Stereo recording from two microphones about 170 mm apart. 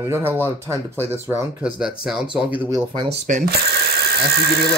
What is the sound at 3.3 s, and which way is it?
Speech, 50° right (ahead or behind).